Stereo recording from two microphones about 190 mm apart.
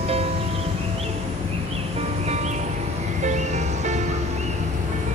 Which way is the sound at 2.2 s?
35° right (ahead or behind).